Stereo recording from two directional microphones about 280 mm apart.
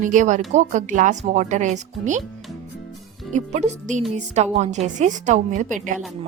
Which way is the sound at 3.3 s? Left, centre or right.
Right.